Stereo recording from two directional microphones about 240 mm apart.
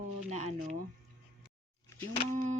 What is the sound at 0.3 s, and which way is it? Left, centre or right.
Speech, right.